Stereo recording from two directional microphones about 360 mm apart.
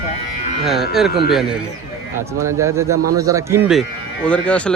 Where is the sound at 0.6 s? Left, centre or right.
Centre.